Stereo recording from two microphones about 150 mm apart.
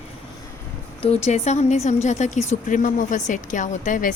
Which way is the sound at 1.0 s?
45° left (ahead or behind).